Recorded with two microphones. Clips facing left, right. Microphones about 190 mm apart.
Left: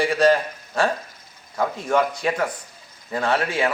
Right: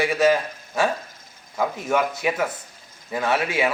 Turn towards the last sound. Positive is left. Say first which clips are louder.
# even
turn(degrees=-5)  # may be behind; listen again after turning